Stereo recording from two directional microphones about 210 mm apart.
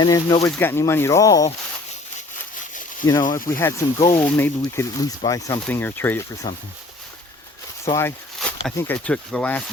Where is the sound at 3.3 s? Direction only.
15° left (ahead or behind).